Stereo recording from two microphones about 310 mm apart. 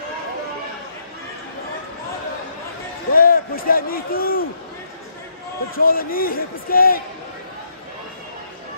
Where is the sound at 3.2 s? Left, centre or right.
Left.